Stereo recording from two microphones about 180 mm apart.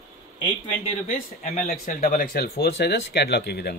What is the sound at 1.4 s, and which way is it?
Speech, 40° left (ahead or behind).